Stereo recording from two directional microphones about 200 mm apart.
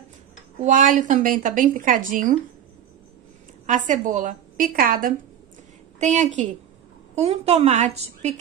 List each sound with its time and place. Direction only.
0.7 s speech: 40° right (ahead or behind)
3.6 s speech: 40° right (ahead or behind)